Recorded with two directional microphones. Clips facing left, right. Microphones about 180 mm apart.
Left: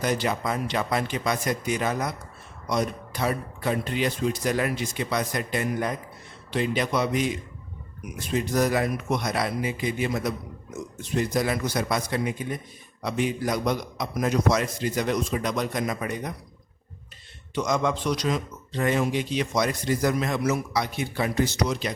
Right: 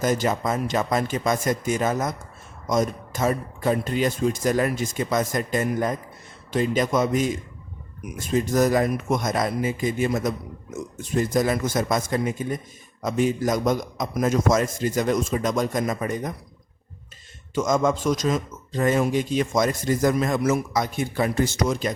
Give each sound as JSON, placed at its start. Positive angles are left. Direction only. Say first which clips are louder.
{"t": 0.0, "sound": "speech", "louder": "right 3 dB", "side_deg": -45}
{"t": 17.5, "sound": "speech", "louder": "right 4 dB", "side_deg": -45}